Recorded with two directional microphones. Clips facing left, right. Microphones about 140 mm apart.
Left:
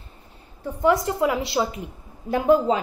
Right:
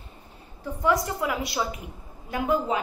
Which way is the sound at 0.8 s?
25° left (ahead or behind).